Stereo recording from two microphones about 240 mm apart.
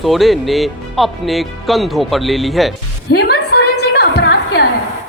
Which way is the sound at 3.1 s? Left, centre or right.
Left.